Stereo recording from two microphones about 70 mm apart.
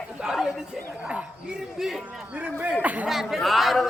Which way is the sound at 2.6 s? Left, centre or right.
Right.